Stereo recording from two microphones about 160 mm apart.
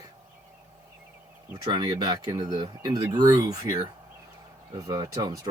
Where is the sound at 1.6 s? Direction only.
25° right (ahead or behind).